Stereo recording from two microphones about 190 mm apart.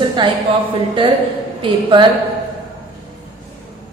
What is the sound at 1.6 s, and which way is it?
Speech, 25° right (ahead or behind).